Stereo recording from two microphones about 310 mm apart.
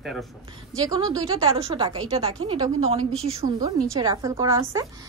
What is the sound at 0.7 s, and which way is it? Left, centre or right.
A woman's voice, centre.